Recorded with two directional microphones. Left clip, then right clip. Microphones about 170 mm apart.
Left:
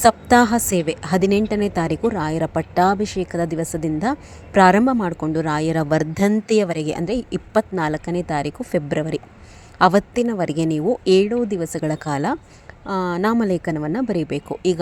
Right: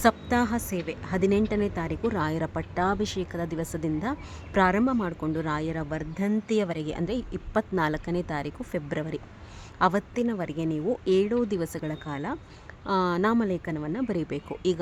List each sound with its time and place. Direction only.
0.0 s a woman's voice: 40° left (ahead or behind)
2.0 s a woman's voice: 20° left (ahead or behind); by 6.3 s 45° left (ahead or behind)
6.3 s a woman's voice: 25° left (ahead or behind)
10.8 s a woman's voice: 30° left (ahead or behind)
11.3 s a woman's voice: 15° left (ahead or behind)
11.8 s a woman's voice: 35° left (ahead or behind)
12.8 s a woman's voice: 15° left (ahead or behind)